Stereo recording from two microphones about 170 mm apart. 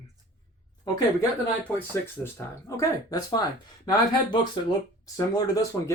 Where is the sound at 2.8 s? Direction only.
20° left (ahead or behind).